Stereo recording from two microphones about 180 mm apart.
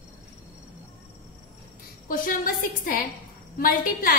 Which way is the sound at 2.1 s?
50° left (ahead or behind).